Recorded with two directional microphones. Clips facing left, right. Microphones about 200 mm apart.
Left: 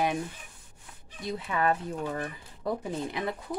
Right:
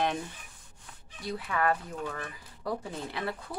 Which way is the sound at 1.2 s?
20° left (ahead or behind).